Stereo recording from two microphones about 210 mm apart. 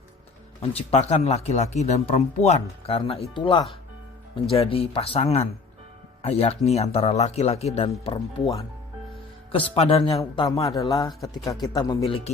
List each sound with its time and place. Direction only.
0.6 s speech: 30° left (ahead or behind)
9.7 s speech: 25° left (ahead or behind)
10.5 s speech: 15° left (ahead or behind)